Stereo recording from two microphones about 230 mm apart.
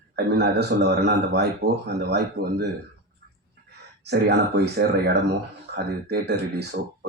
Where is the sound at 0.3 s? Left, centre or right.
Right.